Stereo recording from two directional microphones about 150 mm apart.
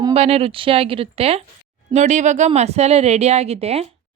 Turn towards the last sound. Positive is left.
turn(degrees=-45)  # may be behind; listen again after turning